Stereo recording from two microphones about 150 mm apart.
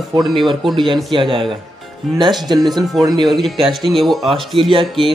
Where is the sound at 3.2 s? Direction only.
Centre (ahead or behind).